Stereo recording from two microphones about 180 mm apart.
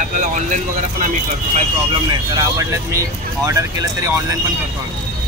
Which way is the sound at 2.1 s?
20° right (ahead or behind).